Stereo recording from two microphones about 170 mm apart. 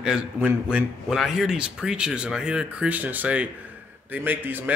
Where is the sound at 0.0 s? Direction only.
5° right (ahead or behind).